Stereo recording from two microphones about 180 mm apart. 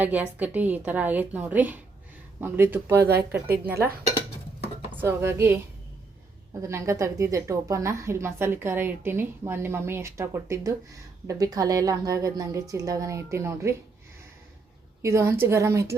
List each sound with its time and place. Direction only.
0.0 s a woman's voice: 10° right (ahead or behind)
3.0 s speech: 65° right (ahead or behind)
3.7 s a woman's voice: 10° right (ahead or behind)
4.9 s a woman's voice: 15° right (ahead or behind)
15.0 s a woman's voice: 15° right (ahead or behind)